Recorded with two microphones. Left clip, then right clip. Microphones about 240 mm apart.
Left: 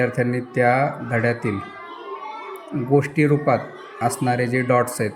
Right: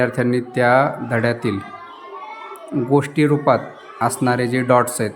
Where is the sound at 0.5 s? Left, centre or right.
Centre.